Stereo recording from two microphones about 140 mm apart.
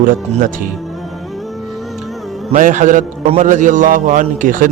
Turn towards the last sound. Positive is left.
turn(degrees=-75)  # may be behind; listen again after turning